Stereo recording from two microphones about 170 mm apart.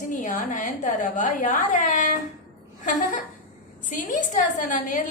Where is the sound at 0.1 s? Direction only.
50° left (ahead or behind).